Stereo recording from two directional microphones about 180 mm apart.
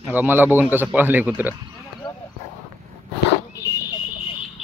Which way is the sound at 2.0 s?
25° left (ahead or behind).